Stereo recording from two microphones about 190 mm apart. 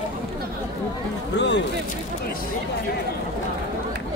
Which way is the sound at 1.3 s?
65° left (ahead or behind).